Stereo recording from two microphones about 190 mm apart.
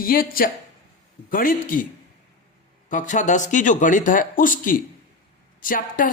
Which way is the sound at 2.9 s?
40° left (ahead or behind).